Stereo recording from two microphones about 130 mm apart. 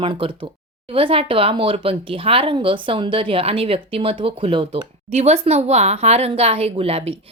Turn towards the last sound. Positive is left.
turn(degrees=-50)  # may be behind; listen again after turning